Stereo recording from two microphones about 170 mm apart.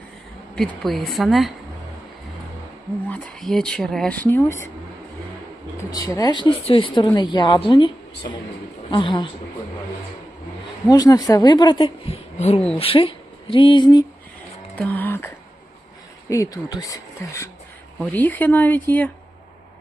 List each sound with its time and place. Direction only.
0.5 s a woman's voice: 5° left (ahead or behind)
3.1 s speech: 5° left (ahead or behind)
5.9 s speech: 20° left (ahead or behind)
8.9 s speech: 30° left (ahead or behind)
10.8 s speech: 20° left (ahead or behind)
14.8 s speech: 10° left (ahead or behind)
16.3 s speech: 20° left (ahead or behind)